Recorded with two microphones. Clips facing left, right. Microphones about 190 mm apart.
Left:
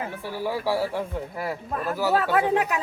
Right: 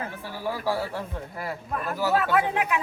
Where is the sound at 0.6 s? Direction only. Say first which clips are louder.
Left 3 dB; 10° left (ahead or behind).